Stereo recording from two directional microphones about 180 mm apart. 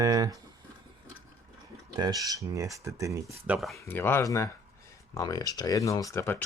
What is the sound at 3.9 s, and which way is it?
Speech, 10° left (ahead or behind).